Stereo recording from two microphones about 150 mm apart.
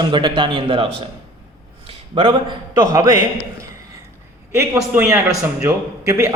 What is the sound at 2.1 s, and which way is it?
Speech, 35° right (ahead or behind).